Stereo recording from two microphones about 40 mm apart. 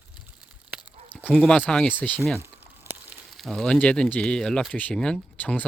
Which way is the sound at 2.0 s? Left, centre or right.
Left.